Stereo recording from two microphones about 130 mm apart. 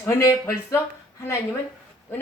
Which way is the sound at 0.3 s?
20° left (ahead or behind).